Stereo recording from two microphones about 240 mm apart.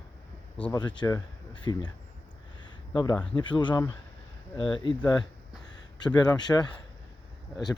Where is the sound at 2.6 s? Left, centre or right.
Centre.